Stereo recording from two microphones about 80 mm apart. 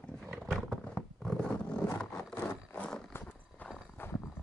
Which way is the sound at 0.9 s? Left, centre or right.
Centre.